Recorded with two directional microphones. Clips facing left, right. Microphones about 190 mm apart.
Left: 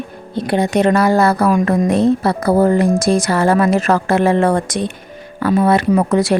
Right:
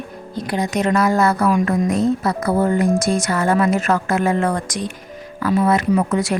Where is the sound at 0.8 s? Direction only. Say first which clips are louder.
Left 3 dB; 30° left (ahead or behind).